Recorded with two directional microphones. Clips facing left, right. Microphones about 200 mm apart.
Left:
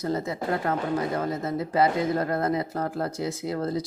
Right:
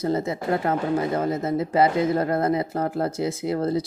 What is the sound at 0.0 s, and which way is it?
Speech, 25° right (ahead or behind).